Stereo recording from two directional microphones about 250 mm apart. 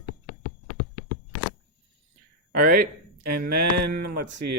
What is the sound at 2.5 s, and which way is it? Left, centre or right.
Speech, right.